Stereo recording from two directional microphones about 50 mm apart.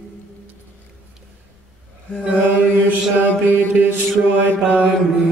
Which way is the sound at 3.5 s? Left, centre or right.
Right.